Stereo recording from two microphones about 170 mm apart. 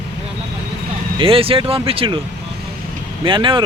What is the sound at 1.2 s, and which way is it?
Speech, 35° right (ahead or behind).